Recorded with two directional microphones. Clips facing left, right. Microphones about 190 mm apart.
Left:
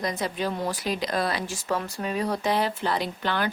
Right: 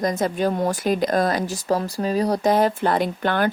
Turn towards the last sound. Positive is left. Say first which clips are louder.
# right 6 dB
turn(degrees=-50)  # may be behind; listen again after turning